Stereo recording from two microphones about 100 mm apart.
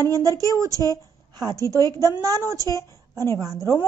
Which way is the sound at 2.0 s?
30° right (ahead or behind).